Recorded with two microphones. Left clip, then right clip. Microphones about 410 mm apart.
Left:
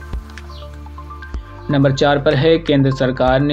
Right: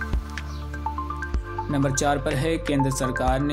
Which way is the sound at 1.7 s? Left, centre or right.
Right.